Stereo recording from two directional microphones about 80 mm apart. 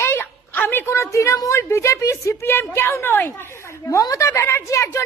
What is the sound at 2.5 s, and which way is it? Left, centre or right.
Speech, left.